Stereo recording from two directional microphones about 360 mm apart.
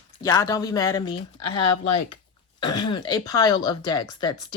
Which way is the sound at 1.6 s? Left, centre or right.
Left.